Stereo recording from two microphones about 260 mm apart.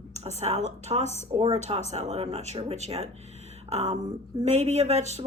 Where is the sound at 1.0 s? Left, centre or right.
Left.